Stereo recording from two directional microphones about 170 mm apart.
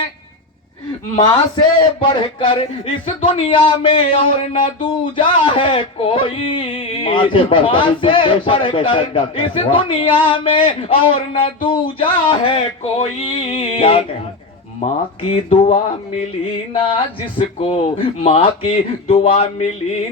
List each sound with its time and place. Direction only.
1.8 s speech: 30° left (ahead or behind)